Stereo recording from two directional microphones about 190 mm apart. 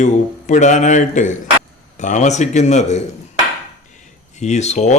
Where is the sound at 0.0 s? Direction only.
40° left (ahead or behind).